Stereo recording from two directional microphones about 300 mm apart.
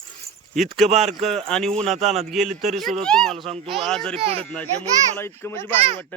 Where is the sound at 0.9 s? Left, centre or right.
Right.